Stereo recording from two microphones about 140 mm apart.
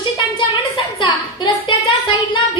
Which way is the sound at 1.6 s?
35° left (ahead or behind).